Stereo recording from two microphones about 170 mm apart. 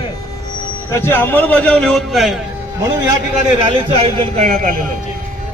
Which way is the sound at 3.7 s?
35° right (ahead or behind).